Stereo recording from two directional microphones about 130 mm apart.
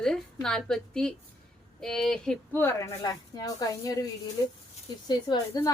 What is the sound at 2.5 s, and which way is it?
A woman's voice, 20° left (ahead or behind).